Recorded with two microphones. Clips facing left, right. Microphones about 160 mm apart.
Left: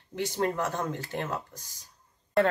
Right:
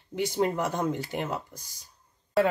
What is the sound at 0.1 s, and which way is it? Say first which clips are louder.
Speech: right 2 dB; 10° right (ahead or behind).